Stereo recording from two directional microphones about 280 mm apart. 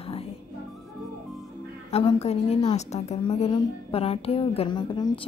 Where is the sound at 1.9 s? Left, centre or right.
Left.